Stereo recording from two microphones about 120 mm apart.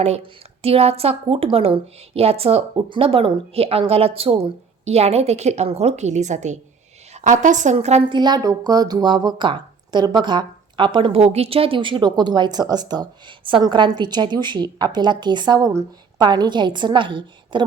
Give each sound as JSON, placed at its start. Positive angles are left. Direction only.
{"t": 0.0, "sound": "a woman's voice", "side_deg": -60}
{"t": 8.1, "sound": "speech", "side_deg": -35}